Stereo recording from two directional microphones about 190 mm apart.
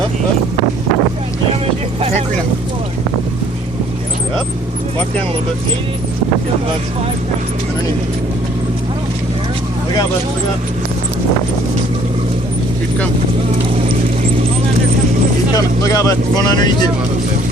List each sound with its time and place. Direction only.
15.5 s speech: 20° left (ahead or behind)